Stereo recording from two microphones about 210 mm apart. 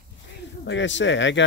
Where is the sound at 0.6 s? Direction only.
60° left (ahead or behind).